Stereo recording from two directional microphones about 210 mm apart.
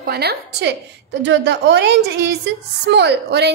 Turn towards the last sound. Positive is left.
turn(degrees=-50)  # may be behind; listen again after turning